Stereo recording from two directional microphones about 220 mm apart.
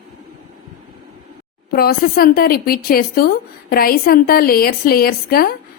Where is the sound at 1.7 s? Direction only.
45° left (ahead or behind).